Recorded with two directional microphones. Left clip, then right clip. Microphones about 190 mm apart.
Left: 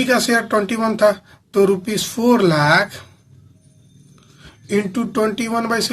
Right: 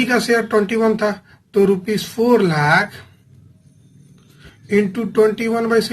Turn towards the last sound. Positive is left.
turn(degrees=40)  # may be behind; listen again after turning